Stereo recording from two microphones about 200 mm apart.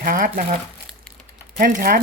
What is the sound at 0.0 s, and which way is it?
Speech, 45° right (ahead or behind).